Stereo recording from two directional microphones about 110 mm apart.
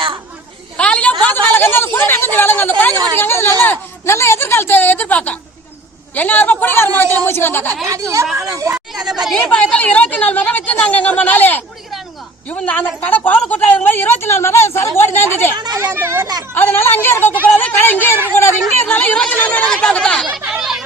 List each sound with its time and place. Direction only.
0.8 s a sound: 10° left (ahead or behind)
3.2 s a woman's voice: 20° left (ahead or behind)
8.4 s speech: 30° right (ahead or behind)
9.3 s a woman's voice: 10° left (ahead or behind)
15.5 s a child's voice: 40° right (ahead or behind)
15.8 s speech: 20° right (ahead or behind)
16.6 s a woman's voice: 20° left (ahead or behind)
18.8 s a sound: 15° left (ahead or behind)
20.4 s a sound: 5° right (ahead or behind)